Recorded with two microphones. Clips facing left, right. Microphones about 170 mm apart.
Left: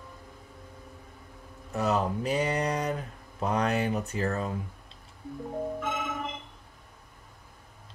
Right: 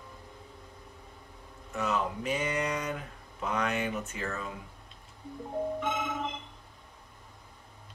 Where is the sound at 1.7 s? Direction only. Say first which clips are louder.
Left 4 dB; 35° left (ahead or behind).